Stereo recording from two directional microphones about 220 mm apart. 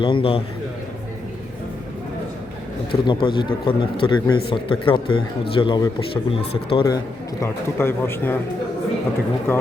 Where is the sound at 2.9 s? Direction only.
20° left (ahead or behind).